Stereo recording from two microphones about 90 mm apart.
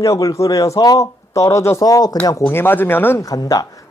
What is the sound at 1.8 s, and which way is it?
Speech, 45° left (ahead or behind).